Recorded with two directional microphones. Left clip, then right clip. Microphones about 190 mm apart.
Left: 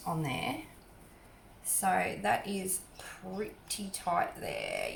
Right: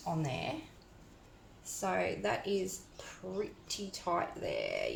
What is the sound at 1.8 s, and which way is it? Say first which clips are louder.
Speech: left 3 dB; 35° right (ahead or behind).